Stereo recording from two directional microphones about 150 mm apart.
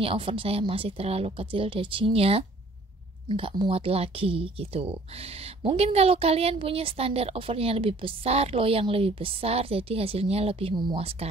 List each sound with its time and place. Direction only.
0.0 s speech: 35° right (ahead or behind)